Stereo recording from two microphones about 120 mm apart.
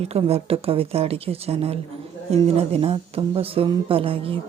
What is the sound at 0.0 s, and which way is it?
A woman's voice, 60° right (ahead or behind).